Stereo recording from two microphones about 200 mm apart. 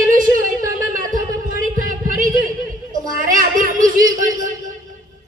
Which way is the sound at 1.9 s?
40° right (ahead or behind).